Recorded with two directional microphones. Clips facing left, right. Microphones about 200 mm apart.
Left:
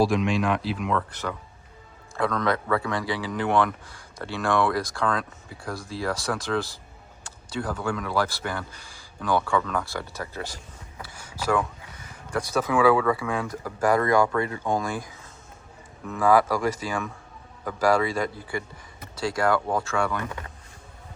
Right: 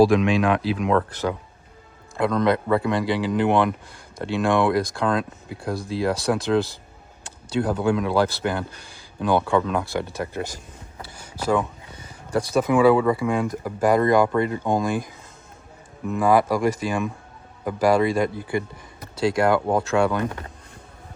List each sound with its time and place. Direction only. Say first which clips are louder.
0.0 s speech: right 5 dB; 60° right (ahead or behind)
0.9 s speech: right 7 dB; 45° right (ahead or behind)
2.1 s speech: right 5 dB; 20° right (ahead or behind)
11.0 s a sound: right 2 dB; 20° right (ahead or behind)
12.3 s speech: right 5 dB; 25° right (ahead or behind)
16.0 s speech: right 2 dB; 20° right (ahead or behind)
19.4 s speech: right 3 dB; 20° right (ahead or behind)